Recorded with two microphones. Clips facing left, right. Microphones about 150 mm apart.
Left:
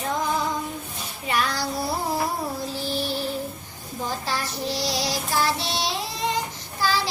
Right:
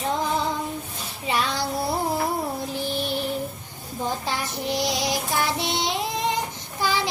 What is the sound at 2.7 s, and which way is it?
Child singing, 20° right (ahead or behind).